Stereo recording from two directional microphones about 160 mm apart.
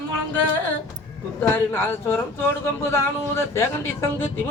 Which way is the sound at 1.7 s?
15° left (ahead or behind).